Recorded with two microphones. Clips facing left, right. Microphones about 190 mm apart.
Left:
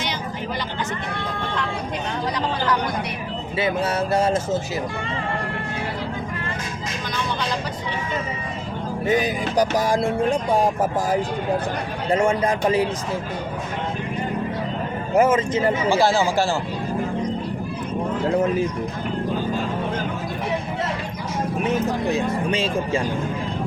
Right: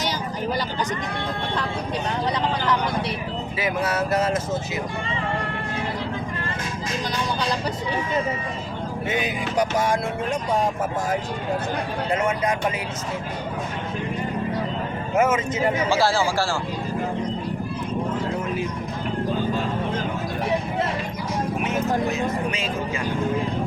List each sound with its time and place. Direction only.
3.6 s speech: 30° left (ahead or behind)
9.0 s music: 35° left (ahead or behind)
12.1 s music: 30° left (ahead or behind)
15.1 s music: 30° left (ahead or behind)
15.9 s speech: 20° left (ahead or behind)
22.1 s music: 30° left (ahead or behind)